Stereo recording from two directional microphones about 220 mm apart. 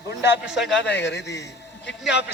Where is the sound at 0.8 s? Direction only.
50° left (ahead or behind).